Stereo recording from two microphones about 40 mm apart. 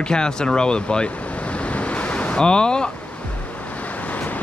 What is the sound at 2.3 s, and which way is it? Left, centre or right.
Speech, left.